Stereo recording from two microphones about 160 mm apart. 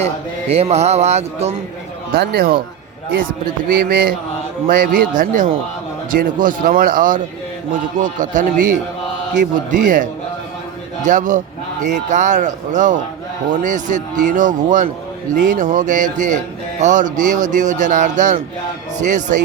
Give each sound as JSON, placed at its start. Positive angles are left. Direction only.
{"t": 0.0, "sound": "speech", "side_deg": -40}
{"t": 2.1, "sound": "speech", "side_deg": -85}
{"t": 3.7, "sound": "speech", "side_deg": -70}